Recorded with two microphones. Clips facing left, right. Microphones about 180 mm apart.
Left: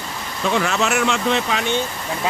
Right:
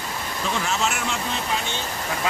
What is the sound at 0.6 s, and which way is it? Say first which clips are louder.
Speech: left 6 dB; 75° left (ahead or behind).